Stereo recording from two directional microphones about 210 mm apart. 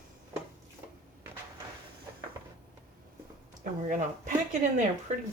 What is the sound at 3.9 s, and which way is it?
Speech, 40° right (ahead or behind).